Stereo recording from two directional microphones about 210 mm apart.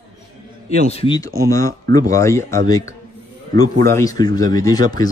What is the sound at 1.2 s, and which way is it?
Speech, 15° left (ahead or behind).